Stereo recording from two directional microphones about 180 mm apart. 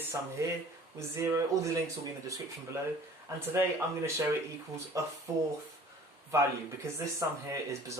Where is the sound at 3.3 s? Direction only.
15° right (ahead or behind).